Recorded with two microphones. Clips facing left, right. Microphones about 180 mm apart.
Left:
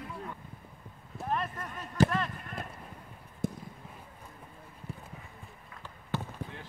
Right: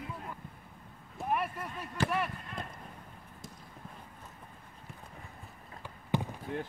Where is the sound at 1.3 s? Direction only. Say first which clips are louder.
Right 1 dB; 10° right (ahead or behind).